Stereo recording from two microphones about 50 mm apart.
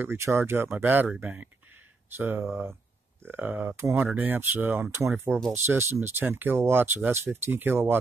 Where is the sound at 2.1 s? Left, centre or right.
Right.